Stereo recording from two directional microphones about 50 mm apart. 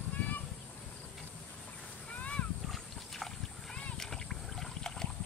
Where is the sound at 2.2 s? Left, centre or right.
Left.